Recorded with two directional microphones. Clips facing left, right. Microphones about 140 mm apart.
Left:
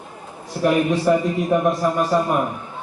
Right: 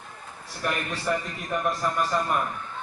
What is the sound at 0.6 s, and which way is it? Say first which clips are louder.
Speech: left 12 dB; 10° left (ahead or behind).